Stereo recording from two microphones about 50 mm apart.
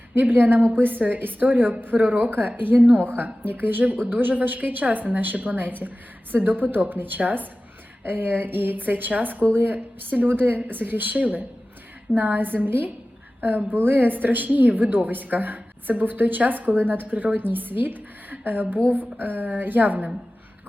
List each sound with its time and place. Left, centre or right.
0.1 s a woman's voice: right